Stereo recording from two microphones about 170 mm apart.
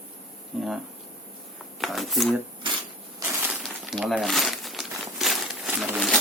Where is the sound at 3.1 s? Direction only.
15° right (ahead or behind).